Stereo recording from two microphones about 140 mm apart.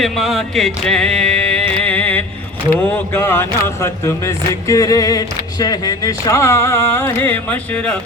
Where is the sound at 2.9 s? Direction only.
15° left (ahead or behind).